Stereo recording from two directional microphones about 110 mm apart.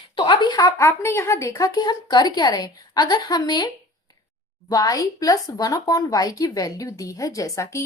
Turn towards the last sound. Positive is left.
turn(degrees=30)  # may be behind; listen again after turning